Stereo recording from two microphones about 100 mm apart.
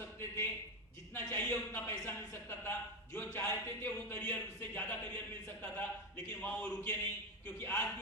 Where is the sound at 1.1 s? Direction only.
20° left (ahead or behind).